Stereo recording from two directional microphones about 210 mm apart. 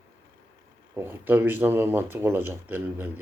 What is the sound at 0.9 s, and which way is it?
Speech, 10° right (ahead or behind).